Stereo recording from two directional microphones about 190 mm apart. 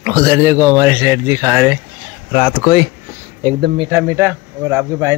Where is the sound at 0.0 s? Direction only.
15° right (ahead or behind).